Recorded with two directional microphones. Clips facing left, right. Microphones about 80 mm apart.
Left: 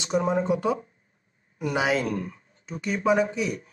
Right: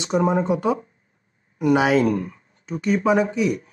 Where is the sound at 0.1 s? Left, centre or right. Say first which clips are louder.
Right 4 dB; right.